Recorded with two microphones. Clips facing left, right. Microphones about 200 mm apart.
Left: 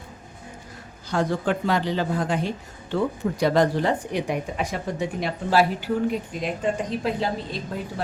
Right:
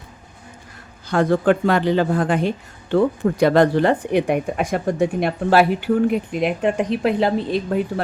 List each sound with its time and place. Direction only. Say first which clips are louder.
1.1 s speech: right 7 dB; 60° right (ahead or behind)